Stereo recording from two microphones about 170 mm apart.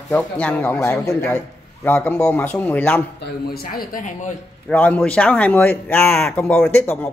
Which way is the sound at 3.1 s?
70° left (ahead or behind).